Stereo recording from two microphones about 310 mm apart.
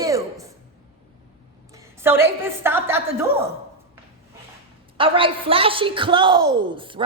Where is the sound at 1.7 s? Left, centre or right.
Centre.